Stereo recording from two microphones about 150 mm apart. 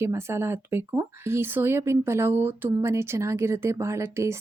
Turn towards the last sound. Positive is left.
turn(degrees=-20)  # may be behind; listen again after turning